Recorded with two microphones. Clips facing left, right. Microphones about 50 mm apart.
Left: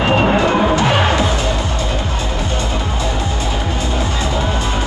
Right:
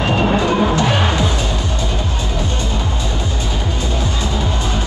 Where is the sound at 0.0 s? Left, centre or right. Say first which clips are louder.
Left 2 dB; left.